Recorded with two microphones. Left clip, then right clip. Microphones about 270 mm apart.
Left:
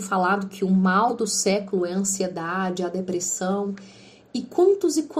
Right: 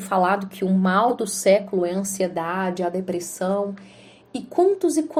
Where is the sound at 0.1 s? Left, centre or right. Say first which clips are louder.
Right 2 dB; right.